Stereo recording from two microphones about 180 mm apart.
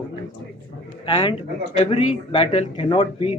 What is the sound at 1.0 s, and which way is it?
Speech, 25° left (ahead or behind).